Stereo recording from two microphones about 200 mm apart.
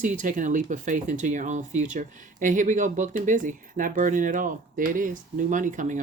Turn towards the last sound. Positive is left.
turn(degrees=-40)  # may be behind; listen again after turning